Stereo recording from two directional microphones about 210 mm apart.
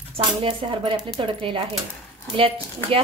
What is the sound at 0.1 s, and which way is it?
Speech, 25° right (ahead or behind).